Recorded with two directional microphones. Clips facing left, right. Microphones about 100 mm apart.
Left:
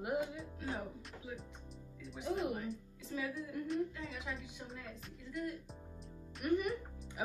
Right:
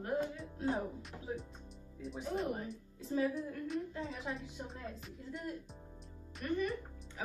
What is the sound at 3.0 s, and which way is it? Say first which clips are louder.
A woman's voice: right 8 dB; 40° right (ahead or behind).